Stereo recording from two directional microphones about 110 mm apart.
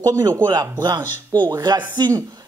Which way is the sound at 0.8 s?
40° right (ahead or behind).